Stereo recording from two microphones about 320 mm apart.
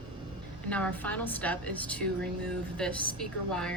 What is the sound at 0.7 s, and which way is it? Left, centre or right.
A woman's voice, centre.